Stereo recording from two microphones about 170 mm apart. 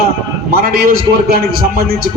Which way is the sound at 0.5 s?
60° right (ahead or behind).